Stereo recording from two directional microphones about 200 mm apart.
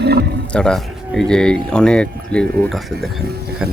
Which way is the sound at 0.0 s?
55° right (ahead or behind).